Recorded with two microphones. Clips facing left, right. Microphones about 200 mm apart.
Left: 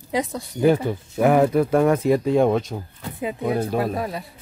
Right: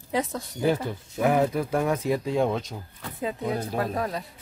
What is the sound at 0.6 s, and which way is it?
Speech, 60° left (ahead or behind).